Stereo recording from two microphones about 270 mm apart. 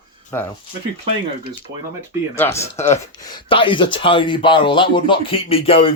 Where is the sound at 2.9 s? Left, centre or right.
Centre.